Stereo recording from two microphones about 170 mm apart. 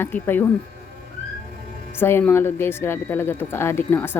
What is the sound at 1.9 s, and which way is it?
Speech, 15° left (ahead or behind).